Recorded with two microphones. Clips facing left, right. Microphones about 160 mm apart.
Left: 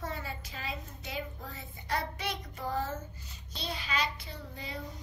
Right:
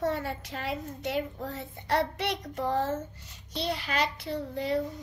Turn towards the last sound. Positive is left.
turn(degrees=-70)  # may be behind; listen again after turning